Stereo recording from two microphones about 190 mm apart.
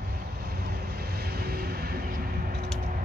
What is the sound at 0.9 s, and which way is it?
Vehicle, 55° right (ahead or behind).